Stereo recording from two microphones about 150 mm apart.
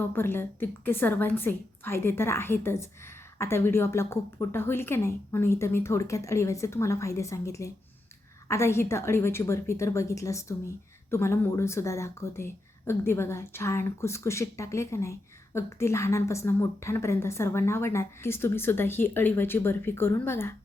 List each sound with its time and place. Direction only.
0.0 s a woman's voice: 15° left (ahead or behind)